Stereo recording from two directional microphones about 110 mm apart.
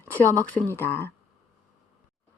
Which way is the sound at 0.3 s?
20° left (ahead or behind).